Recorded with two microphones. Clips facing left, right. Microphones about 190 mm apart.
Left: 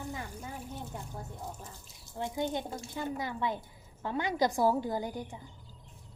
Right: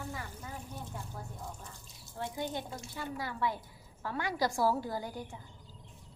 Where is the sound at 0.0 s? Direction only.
20° left (ahead or behind).